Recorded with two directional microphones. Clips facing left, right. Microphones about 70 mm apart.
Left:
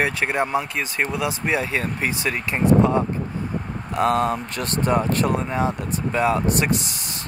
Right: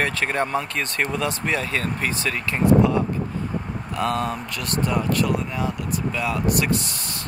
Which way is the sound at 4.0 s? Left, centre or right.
Left.